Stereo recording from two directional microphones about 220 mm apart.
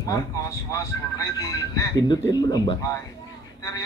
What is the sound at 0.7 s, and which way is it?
Speech, 15° left (ahead or behind).